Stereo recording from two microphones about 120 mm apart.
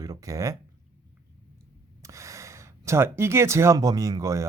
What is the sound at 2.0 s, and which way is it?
Speech, 25° right (ahead or behind).